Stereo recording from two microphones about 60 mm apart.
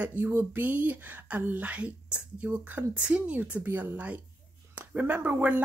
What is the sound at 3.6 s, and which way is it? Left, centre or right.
Speech, right.